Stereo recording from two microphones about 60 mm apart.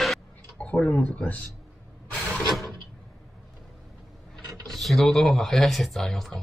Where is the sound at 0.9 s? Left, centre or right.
Left.